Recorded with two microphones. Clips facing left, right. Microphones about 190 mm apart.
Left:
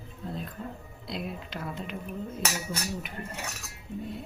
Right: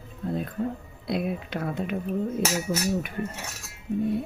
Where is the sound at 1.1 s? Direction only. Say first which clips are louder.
Right 8 dB; 60° right (ahead or behind).